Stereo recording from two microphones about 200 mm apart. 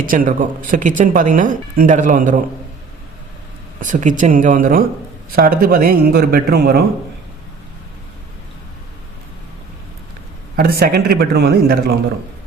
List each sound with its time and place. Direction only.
0.0 s speech: 40° right (ahead or behind)
3.8 s a man's voice: 40° right (ahead or behind)
10.6 s a man's voice: 50° right (ahead or behind)